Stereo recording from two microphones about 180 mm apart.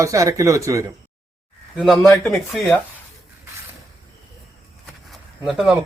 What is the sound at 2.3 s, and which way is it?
Speech, 5° left (ahead or behind).